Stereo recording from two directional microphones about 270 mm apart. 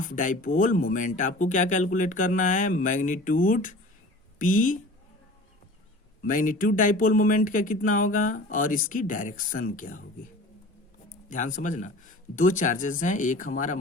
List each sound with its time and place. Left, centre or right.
0.0 s speech: left
6.2 s speech: left
11.3 s speech: left